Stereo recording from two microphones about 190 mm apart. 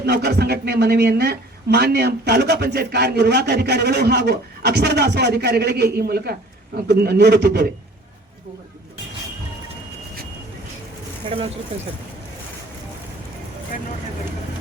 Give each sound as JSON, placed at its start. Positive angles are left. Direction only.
{"t": 0.0, "sound": "speech", "side_deg": -60}
{"t": 11.3, "sound": "speech", "side_deg": -30}